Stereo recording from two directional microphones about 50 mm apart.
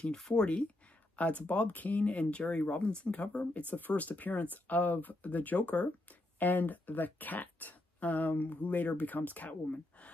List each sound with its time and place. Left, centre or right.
0.0 s speech: centre
1.1 s speech: left